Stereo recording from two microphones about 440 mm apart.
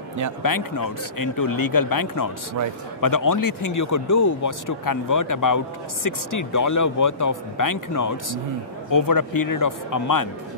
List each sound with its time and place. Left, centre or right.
0.4 s speech: left